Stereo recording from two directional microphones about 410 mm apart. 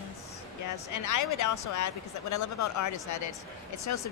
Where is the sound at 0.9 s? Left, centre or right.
Left.